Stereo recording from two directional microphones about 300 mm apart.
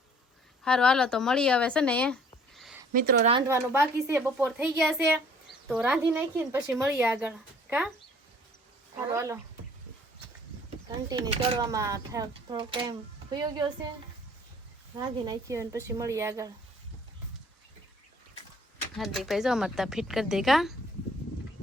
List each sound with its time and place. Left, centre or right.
0.6 s speech: centre
2.9 s speech: right
3.3 s speech: centre
9.1 s speech: centre
10.8 s speech: centre
14.9 s speech: centre
18.9 s speech: centre